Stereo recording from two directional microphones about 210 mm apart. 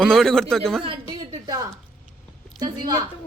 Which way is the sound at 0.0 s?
Centre (ahead or behind).